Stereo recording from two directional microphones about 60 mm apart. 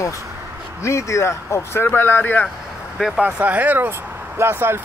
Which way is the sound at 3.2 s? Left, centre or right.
Right.